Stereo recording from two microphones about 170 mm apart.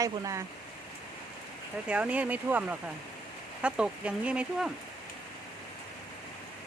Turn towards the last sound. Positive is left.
turn(degrees=-5)  # may be behind; listen again after turning